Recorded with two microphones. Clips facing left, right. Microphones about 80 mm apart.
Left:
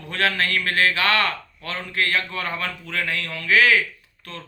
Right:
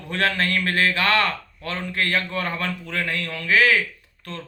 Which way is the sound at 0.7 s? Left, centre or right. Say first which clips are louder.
Even; right.